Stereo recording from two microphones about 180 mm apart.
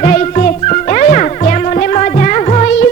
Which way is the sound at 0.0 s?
45° left (ahead or behind).